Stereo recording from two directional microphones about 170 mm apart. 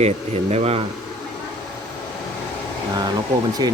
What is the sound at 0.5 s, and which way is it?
Speech, 40° right (ahead or behind).